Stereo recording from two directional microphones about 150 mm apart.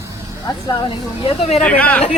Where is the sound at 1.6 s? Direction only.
10° left (ahead or behind).